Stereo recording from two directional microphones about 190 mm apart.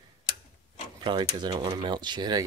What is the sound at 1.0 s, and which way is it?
Speech, 25° right (ahead or behind).